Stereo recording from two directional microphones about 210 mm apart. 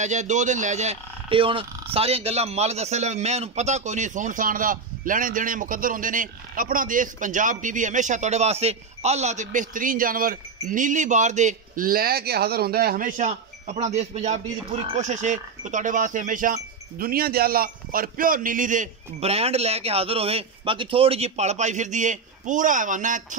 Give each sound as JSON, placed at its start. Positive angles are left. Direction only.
{"t": 0.0, "sound": "speech", "side_deg": -35}